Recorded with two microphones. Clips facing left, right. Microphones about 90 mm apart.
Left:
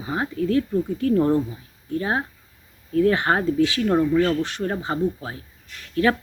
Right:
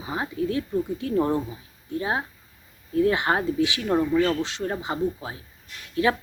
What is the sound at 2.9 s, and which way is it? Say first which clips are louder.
Speech: left 2 dB; 15° right (ahead or behind).